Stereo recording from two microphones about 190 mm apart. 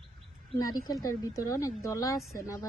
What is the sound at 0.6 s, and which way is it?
A woman's voice, 20° left (ahead or behind).